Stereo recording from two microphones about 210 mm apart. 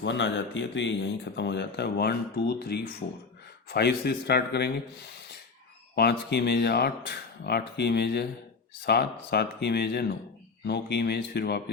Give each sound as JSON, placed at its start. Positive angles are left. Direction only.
{"t": 0.0, "sound": "speech", "side_deg": 60}
{"t": 5.9, "sound": "speech", "side_deg": 50}